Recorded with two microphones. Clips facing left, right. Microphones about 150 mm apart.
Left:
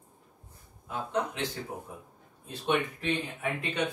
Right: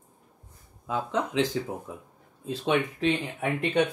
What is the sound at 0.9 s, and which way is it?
Speech, 90° right.